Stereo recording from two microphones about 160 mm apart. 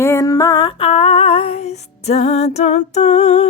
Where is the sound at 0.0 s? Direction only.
15° left (ahead or behind).